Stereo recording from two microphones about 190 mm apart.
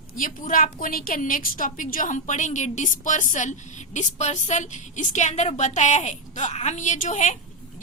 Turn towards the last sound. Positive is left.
turn(degrees=40)  # may be behind; listen again after turning